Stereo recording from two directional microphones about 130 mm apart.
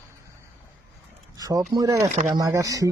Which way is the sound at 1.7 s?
25° right (ahead or behind).